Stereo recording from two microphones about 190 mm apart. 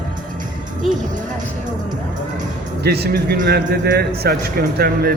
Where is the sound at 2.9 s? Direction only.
60° right (ahead or behind).